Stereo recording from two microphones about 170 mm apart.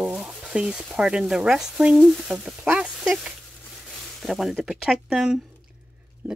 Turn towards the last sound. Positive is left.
turn(degrees=-15)  # may be behind; listen again after turning